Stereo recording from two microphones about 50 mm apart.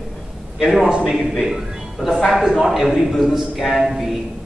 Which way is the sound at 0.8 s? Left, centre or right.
Centre.